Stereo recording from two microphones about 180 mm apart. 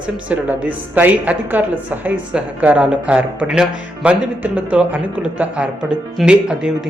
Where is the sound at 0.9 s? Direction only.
10° right (ahead or behind).